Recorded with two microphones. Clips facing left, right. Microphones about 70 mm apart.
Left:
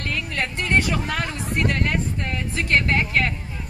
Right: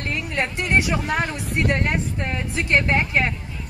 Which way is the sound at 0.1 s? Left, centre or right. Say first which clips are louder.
Right 2 dB; centre.